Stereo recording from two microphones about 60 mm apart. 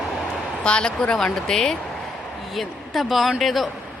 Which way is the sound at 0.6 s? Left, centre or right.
Centre.